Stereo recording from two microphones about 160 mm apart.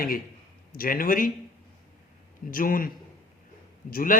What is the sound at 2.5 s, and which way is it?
Speech, 60° left (ahead or behind).